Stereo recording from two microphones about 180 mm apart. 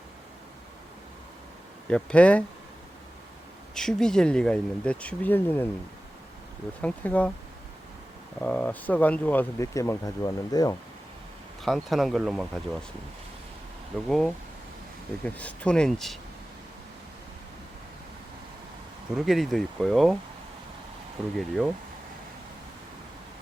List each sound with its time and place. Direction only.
1.9 s speech: 5° left (ahead or behind)
3.8 s speech: 5° left (ahead or behind)
6.8 s speech: 10° left (ahead or behind)
8.4 s speech: 5° left (ahead or behind)
11.6 s speech: centre (ahead or behind)
14.1 s speech: centre (ahead or behind)
19.1 s speech: centre (ahead or behind)
21.3 s speech: centre (ahead or behind)